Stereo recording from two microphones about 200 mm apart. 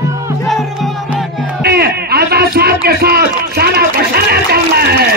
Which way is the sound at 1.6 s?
50° right (ahead or behind).